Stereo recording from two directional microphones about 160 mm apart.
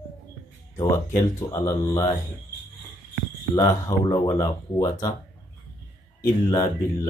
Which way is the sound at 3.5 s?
25° left (ahead or behind).